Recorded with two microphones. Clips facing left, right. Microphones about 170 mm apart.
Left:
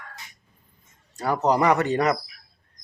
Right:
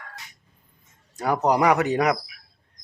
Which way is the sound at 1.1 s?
15° right (ahead or behind).